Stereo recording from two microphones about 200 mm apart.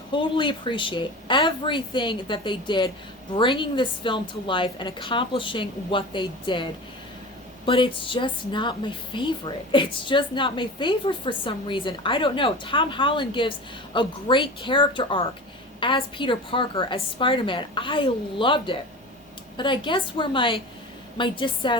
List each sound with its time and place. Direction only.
0.1 s a woman's voice: 25° left (ahead or behind)